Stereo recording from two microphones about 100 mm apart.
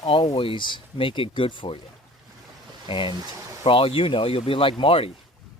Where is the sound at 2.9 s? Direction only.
60° left (ahead or behind).